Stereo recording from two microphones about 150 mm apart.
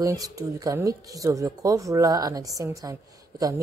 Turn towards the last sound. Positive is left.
turn(degrees=-25)  # may be behind; listen again after turning